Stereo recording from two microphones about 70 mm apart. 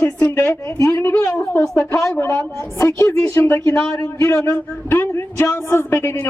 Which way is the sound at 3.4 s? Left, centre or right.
Left.